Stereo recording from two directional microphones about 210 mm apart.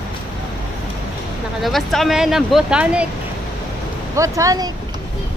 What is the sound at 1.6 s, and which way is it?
Speech, centre (ahead or behind).